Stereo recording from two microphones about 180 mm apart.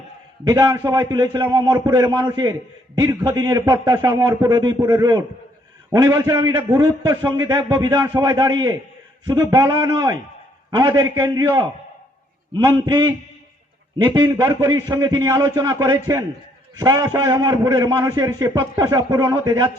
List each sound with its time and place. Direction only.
0.4 s a man's voice: 20° right (ahead or behind)
12.6 s a man's voice: 20° right (ahead or behind)